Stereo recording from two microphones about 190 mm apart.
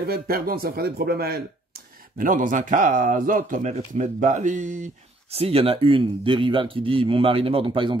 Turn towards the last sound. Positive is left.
turn(degrees=-25)  # may be behind; listen again after turning